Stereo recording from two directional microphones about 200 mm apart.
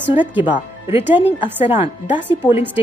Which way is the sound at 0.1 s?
10° right (ahead or behind).